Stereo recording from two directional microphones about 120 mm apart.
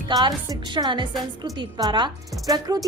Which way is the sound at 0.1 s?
35° right (ahead or behind).